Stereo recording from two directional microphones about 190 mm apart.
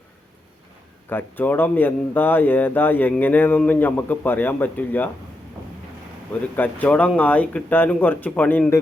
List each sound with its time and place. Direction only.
1.1 s speech: 10° left (ahead or behind)
6.6 s speech: 10° left (ahead or behind)